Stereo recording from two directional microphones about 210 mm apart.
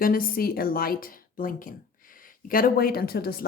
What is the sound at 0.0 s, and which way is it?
Speech, 45° left (ahead or behind).